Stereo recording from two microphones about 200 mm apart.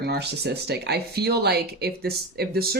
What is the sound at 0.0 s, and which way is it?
Speech, 55° right (ahead or behind).